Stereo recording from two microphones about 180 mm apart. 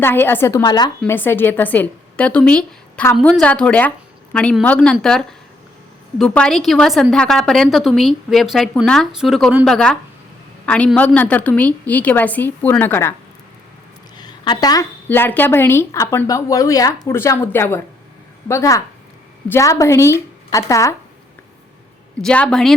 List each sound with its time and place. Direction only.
0.0 s speech: 10° left (ahead or behind)
1.1 s a woman's voice: 10° left (ahead or behind)
14.2 s a sound: 25° left (ahead or behind)
15.0 s speech: 10° left (ahead or behind)
22.2 s a woman's voice: 5° left (ahead or behind)